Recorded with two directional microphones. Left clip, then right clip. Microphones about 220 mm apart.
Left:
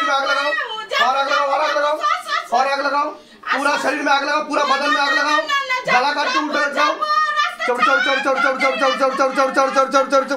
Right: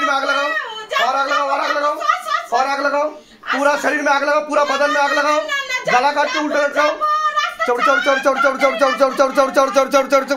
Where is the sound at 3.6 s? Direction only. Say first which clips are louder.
Right 3 dB; 45° right (ahead or behind).